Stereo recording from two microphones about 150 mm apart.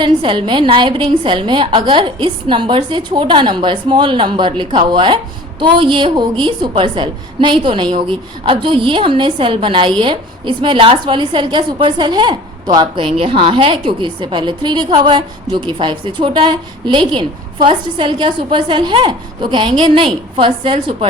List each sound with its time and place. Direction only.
0.0 s a woman's voice: 35° right (ahead or behind)